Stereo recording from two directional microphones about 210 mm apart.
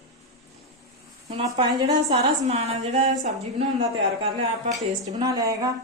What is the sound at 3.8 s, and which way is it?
A woman's voice, 25° right (ahead or behind).